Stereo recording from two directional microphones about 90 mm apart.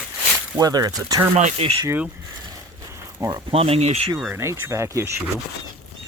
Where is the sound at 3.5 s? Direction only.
85° right.